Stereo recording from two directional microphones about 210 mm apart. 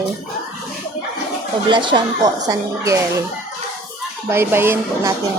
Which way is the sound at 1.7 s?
20° right (ahead or behind).